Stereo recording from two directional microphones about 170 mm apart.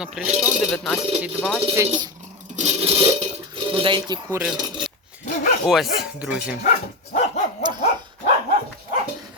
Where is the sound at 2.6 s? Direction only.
35° right (ahead or behind).